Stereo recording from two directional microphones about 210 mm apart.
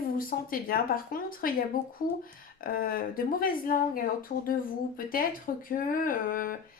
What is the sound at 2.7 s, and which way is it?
Speech, 45° left (ahead or behind).